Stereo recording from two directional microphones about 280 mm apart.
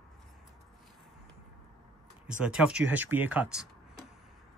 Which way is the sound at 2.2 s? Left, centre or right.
Centre.